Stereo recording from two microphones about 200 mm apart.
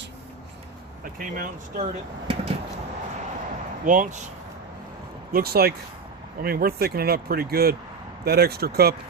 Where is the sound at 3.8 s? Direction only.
40° right (ahead or behind).